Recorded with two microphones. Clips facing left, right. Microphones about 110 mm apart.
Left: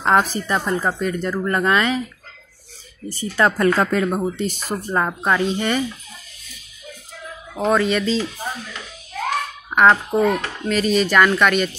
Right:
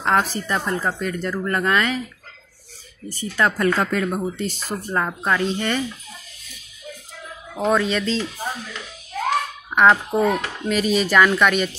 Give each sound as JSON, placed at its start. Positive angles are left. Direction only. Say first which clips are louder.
{"t": 0.0, "sound": "speech", "louder": "left 3 dB", "side_deg": 15}
{"t": 3.1, "sound": "speech", "louder": "left 3 dB", "side_deg": 35}
{"t": 4.5, "sound": "speech", "louder": "left 2 dB", "side_deg": 15}
{"t": 7.5, "sound": "speech", "louder": "left 2 dB", "side_deg": 0}
{"t": 10.1, "sound": "speech", "louder": "left 1 dB", "side_deg": -5}